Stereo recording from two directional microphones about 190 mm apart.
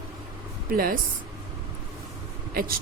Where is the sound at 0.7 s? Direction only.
50° right (ahead or behind).